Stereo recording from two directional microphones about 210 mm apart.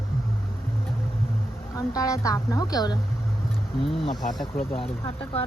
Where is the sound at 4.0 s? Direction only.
20° left (ahead or behind).